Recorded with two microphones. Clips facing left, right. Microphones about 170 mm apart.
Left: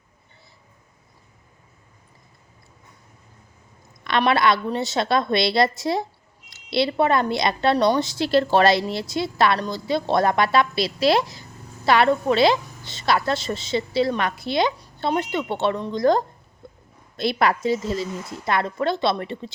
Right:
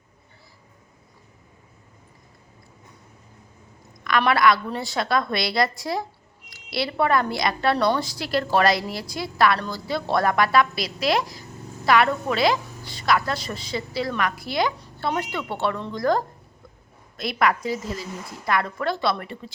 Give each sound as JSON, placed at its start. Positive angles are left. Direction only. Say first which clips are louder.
{"t": 4.2, "sound": "a woman's voice", "louder": "left 1 dB", "side_deg": 25}